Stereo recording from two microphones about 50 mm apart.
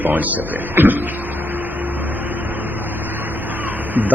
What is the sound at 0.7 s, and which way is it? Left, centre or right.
Printer, right.